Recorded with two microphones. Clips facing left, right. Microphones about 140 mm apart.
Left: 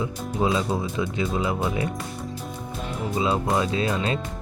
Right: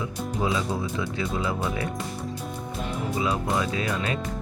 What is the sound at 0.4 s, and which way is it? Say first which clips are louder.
Speech: left 4 dB; 25° left (ahead or behind).